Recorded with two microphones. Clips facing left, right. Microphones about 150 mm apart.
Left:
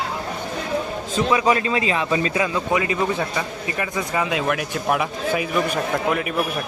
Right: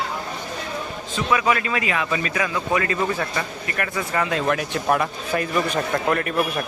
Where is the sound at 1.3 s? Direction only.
25° left (ahead or behind).